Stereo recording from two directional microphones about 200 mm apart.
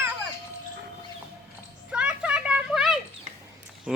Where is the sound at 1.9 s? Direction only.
5° right (ahead or behind).